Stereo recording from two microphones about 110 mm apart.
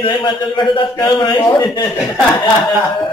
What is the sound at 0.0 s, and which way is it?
A man's voice, 45° left (ahead or behind).